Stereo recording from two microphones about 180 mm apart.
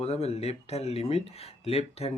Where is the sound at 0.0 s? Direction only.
35° left (ahead or behind).